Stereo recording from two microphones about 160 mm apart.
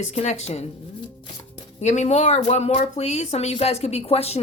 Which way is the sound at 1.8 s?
45° left (ahead or behind).